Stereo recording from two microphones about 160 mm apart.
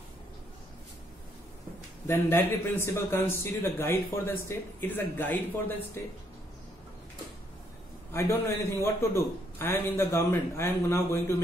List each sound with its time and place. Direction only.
2.0 s a man's voice: 15° left (ahead or behind)
8.1 s a man's voice: 15° left (ahead or behind)